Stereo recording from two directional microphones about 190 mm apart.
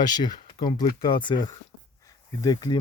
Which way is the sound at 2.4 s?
20° left (ahead or behind).